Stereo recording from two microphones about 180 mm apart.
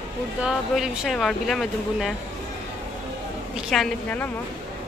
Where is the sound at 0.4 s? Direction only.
Centre (ahead or behind).